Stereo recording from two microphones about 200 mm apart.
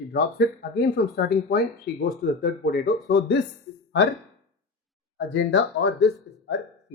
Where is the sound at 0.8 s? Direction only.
50° left (ahead or behind).